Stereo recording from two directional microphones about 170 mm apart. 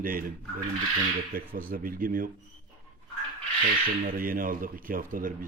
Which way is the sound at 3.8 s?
55° right (ahead or behind).